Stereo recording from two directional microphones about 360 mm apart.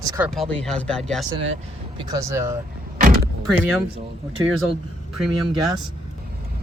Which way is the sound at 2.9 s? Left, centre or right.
Right.